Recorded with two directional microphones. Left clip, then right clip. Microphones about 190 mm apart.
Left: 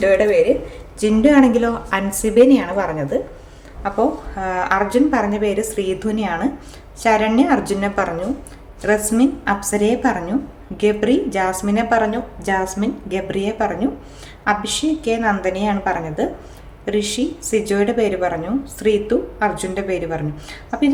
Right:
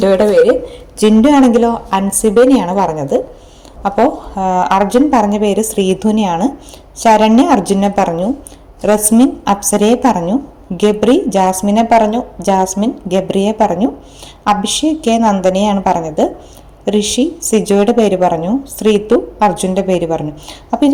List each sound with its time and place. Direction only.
0.0 s a man's voice: centre (ahead or behind)
0.9 s a woman's voice: 30° right (ahead or behind)
15.0 s a woman's voice: 25° right (ahead or behind)